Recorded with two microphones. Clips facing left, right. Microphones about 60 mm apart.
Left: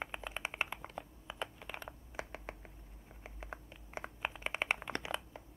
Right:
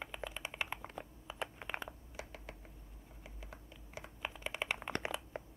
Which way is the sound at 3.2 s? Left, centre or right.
Left.